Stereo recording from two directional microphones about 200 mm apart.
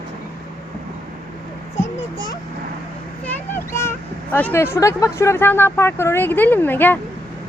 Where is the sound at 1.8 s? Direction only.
35° left (ahead or behind).